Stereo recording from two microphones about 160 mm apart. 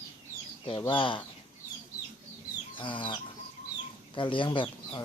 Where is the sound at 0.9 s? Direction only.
30° left (ahead or behind).